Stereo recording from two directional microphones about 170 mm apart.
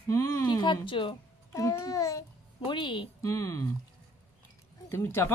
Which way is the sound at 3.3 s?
15° left (ahead or behind).